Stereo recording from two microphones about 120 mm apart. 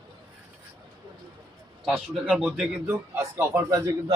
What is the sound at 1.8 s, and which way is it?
Speech, centre (ahead or behind).